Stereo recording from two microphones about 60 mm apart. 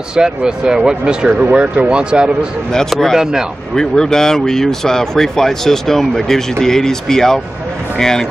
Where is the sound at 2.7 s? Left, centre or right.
Centre.